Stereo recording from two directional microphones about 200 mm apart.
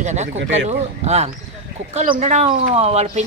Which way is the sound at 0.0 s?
35° right (ahead or behind).